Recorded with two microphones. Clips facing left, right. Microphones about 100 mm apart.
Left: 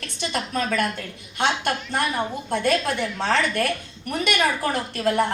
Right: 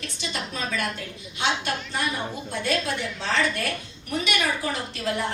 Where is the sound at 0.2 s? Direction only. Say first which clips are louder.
Left 6 dB; 55° left (ahead or behind).